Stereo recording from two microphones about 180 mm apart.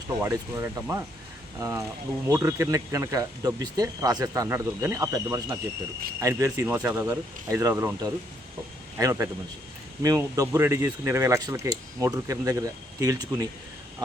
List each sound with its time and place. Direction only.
0.1 s speech: 15° right (ahead or behind)